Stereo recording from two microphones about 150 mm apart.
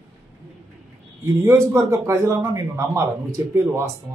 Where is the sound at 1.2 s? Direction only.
15° right (ahead or behind).